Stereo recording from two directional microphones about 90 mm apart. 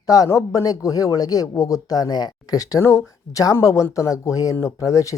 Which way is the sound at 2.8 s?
30° left (ahead or behind).